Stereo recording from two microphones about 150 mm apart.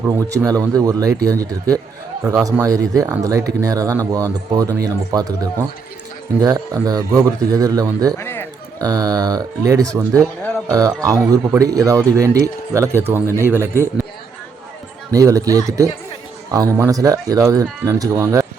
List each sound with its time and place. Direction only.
0.2 s speech: 20° right (ahead or behind)
6.4 s speech: 25° right (ahead or behind)
8.2 s speech: 15° left (ahead or behind)
8.8 s a man's voice: 25° right (ahead or behind)
15.1 s speech: 20° right (ahead or behind)